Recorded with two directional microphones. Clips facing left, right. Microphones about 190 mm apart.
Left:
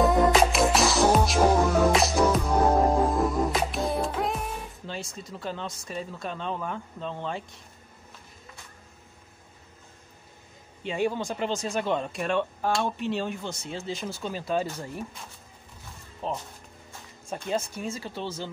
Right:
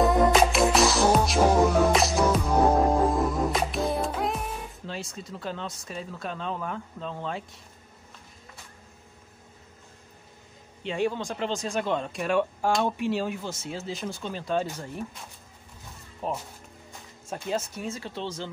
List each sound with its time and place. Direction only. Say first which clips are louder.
0.0 s music: even; centre (ahead or behind)
10.9 s speech: even; 5° left (ahead or behind)
16.2 s speech: right 1 dB; 10° right (ahead or behind)